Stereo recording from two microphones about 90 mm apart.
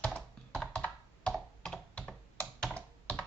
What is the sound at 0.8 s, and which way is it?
Computer keyboard, 5° left (ahead or behind).